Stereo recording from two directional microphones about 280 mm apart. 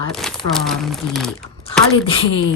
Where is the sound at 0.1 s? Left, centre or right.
Centre.